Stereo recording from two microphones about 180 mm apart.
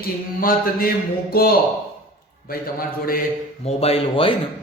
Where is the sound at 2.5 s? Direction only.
55° left (ahead or behind).